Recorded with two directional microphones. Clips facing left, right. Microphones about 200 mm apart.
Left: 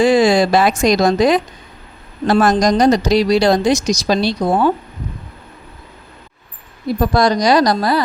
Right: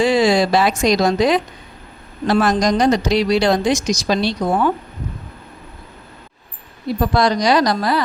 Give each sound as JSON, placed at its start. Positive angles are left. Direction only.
{"t": 0.0, "sound": "a woman's voice", "side_deg": 50}
{"t": 7.1, "sound": "a woman's voice", "side_deg": 40}